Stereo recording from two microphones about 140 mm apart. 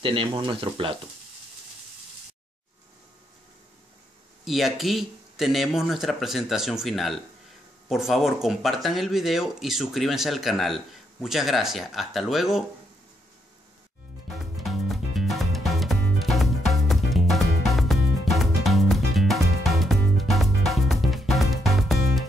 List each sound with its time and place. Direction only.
0.0 s speech: 40° right (ahead or behind)
4.5 s speech: centre (ahead or behind)
14.4 s music: centre (ahead or behind)